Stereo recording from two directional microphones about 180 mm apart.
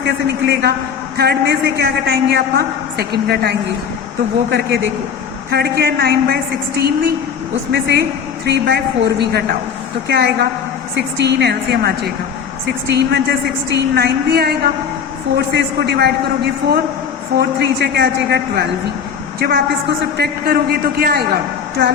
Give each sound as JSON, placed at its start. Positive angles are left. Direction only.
{"t": 0.1, "sound": "a woman's voice", "side_deg": -70}
{"t": 4.4, "sound": "a woman's voice", "side_deg": -75}
{"t": 5.5, "sound": "a woman's voice", "side_deg": -65}